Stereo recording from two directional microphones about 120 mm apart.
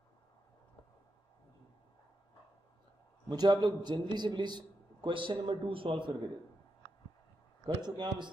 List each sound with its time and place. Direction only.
3.3 s a man's voice: 35° right (ahead or behind)
7.6 s a man's voice: 40° right (ahead or behind)